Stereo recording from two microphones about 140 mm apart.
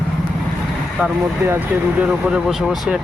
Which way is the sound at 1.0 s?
15° right (ahead or behind).